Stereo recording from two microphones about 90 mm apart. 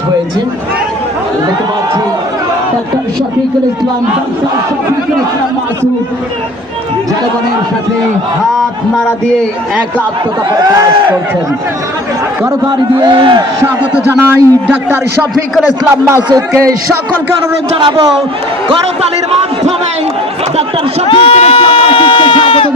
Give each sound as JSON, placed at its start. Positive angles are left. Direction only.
{"t": 10.5, "sound": "speech", "side_deg": -45}
{"t": 13.0, "sound": "a man's voice", "side_deg": -60}
{"t": 14.1, "sound": "a man's voice", "side_deg": -25}
{"t": 21.1, "sound": "a sound", "side_deg": 90}